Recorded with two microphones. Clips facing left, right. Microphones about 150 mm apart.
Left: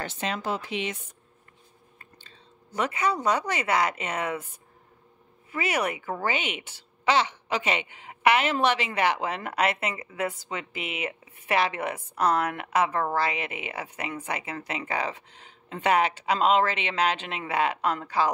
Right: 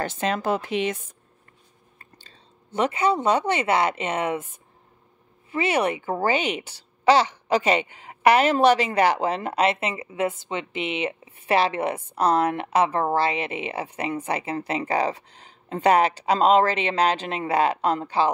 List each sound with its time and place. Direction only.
0.0 s speech: 45° right (ahead or behind)
2.0 s speech: 35° right (ahead or behind)
5.5 s speech: 25° right (ahead or behind)